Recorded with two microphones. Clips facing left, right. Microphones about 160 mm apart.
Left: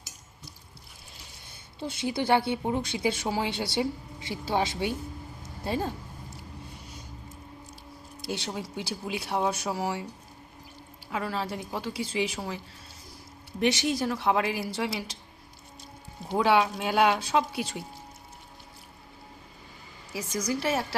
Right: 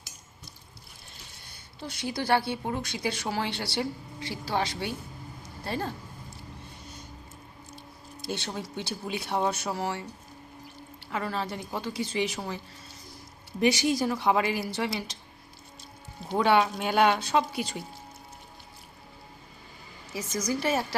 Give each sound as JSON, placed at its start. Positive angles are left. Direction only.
{"t": 1.8, "sound": "a woman's voice", "side_deg": 20}
{"t": 8.3, "sound": "a woman's voice", "side_deg": 10}
{"t": 11.1, "sound": "speech", "side_deg": 5}
{"t": 13.6, "sound": "speech", "side_deg": 0}
{"t": 16.3, "sound": "speech", "side_deg": 5}
{"t": 20.1, "sound": "speech", "side_deg": 10}